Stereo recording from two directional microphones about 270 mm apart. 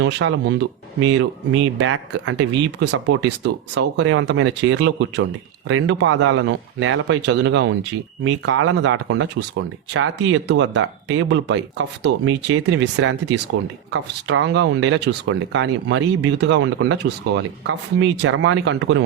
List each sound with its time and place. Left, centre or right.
0.0 s a man's voice: right